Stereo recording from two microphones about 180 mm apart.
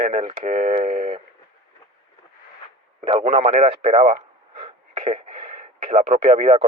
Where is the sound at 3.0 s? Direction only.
35° right (ahead or behind).